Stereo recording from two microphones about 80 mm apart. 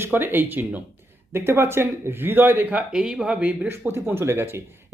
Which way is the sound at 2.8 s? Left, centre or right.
Centre.